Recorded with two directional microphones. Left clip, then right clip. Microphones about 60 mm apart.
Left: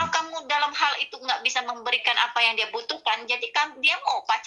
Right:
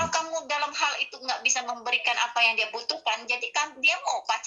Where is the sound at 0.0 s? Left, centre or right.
Right.